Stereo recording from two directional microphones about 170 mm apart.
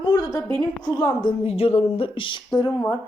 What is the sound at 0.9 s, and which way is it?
A woman's voice, 25° left (ahead or behind).